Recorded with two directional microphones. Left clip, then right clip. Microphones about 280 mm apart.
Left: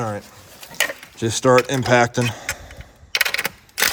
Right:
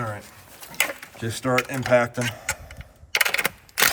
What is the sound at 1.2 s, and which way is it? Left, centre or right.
Speech, centre.